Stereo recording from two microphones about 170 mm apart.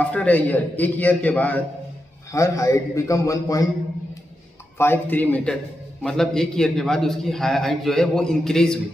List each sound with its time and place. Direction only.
0.0 s a man's voice: 10° left (ahead or behind)
2.3 s a man's voice: 20° left (ahead or behind)
4.7 s a man's voice: 10° left (ahead or behind)